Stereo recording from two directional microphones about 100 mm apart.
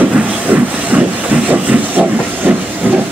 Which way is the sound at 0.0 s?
15° right (ahead or behind).